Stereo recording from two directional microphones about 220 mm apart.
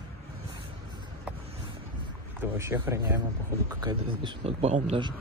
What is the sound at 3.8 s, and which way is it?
A man's voice, 25° right (ahead or behind).